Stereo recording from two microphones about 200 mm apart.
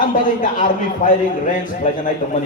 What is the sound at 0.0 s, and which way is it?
A man's voice, 40° left (ahead or behind).